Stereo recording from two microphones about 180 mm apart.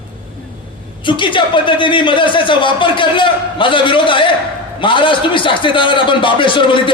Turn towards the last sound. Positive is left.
turn(degrees=25)  # may be behind; listen again after turning